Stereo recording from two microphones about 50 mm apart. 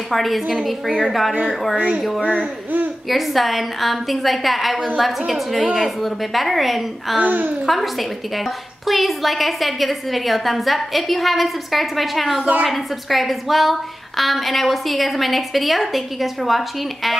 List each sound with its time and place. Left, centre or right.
0.1 s a woman's voice: centre
3.1 s a woman's voice: centre
7.2 s a child's voice: right
7.6 s a woman's voice: centre